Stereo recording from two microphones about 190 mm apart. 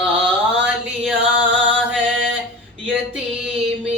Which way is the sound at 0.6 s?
5° right (ahead or behind).